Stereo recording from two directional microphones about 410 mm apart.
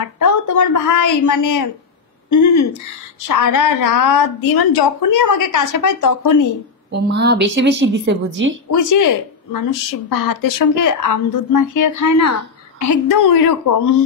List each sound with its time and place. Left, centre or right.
0.2 s a woman's voice: left
6.9 s a woman's voice: right
8.6 s a woman's voice: left